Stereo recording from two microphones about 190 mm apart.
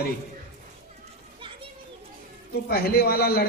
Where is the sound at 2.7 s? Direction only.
55° left (ahead or behind).